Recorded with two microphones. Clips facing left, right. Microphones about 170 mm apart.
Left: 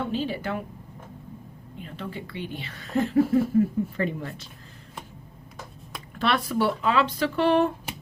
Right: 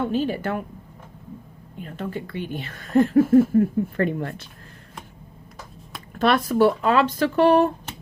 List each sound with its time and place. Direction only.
0.1 s speech: 50° right (ahead or behind)
1.8 s speech: 50° right (ahead or behind)
6.1 s speech: 45° right (ahead or behind)